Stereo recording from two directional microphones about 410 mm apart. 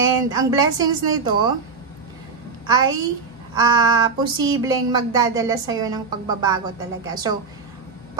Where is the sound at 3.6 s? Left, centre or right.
Centre.